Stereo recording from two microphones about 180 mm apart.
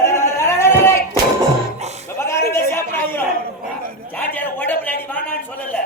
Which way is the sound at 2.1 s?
15° left (ahead or behind).